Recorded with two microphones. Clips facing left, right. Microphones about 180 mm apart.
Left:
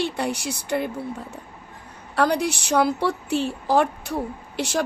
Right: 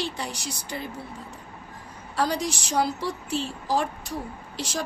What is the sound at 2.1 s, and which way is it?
A woman's voice, 60° left (ahead or behind).